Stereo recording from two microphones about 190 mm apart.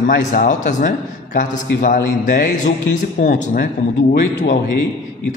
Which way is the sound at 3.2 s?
40° left (ahead or behind).